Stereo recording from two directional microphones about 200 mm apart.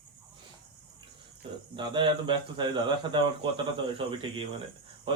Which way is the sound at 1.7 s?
25° right (ahead or behind).